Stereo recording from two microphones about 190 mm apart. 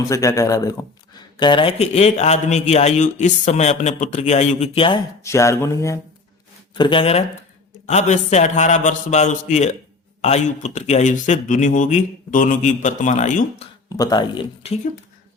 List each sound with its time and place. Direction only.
0.0 s speech: 15° left (ahead or behind)
5.2 s speech: 15° left (ahead or behind)
6.7 s speech: 25° left (ahead or behind)
13.9 s speech: 20° left (ahead or behind)